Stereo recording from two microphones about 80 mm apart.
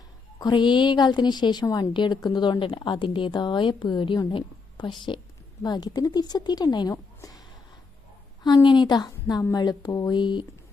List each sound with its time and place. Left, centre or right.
0.3 s a woman's voice: left
5.6 s speech: left
6.9 s a sound: left
8.4 s speech: left
9.0 s a woman's voice: left
10.2 s a woman's voice: left